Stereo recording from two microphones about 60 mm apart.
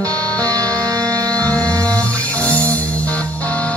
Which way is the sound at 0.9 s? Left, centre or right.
Right.